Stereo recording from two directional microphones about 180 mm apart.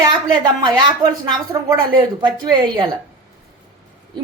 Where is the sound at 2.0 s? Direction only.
25° right (ahead or behind).